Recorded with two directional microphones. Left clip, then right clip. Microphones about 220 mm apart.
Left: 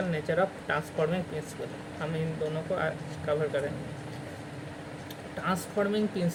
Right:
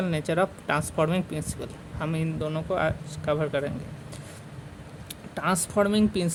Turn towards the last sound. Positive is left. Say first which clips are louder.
# right 4 dB
turn(degrees=-50)  # may be behind; listen again after turning